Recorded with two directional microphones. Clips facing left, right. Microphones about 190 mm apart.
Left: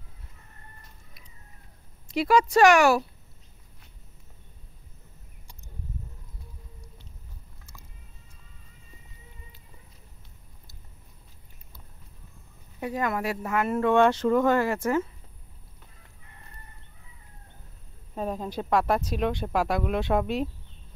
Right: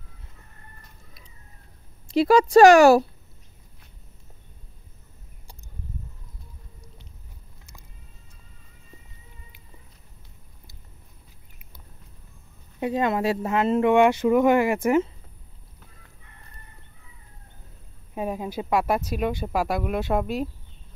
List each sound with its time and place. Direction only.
2.0 s speech: 30° right (ahead or behind)
12.8 s speech: 25° right (ahead or behind)
18.1 s speech: 10° right (ahead or behind)